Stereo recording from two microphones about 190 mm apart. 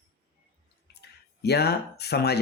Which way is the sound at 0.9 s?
60° left (ahead or behind).